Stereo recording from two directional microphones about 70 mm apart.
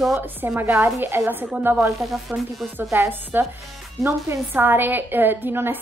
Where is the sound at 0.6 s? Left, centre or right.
Right.